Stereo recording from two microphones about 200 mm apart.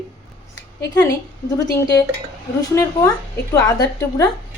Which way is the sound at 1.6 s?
15° left (ahead or behind).